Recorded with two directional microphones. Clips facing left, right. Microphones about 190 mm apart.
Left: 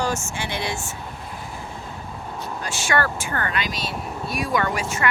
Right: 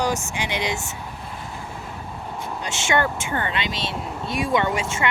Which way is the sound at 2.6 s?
25° right (ahead or behind).